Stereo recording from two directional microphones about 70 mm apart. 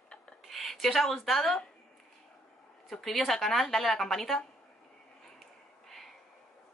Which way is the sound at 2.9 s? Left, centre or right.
Centre.